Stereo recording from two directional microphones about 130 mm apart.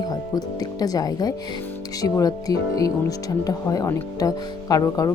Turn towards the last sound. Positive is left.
turn(degrees=30)  # may be behind; listen again after turning